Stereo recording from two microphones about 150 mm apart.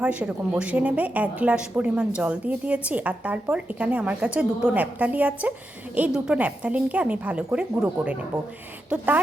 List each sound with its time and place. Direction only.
0.0 s speech: 10° right (ahead or behind)